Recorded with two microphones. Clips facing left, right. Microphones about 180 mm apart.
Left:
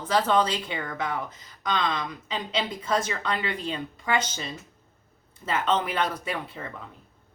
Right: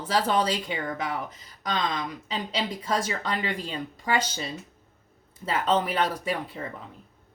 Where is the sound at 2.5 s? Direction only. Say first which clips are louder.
Left 1 dB; 35° right (ahead or behind).